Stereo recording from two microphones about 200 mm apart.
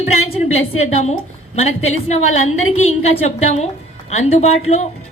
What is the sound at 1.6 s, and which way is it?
Speech, 35° left (ahead or behind).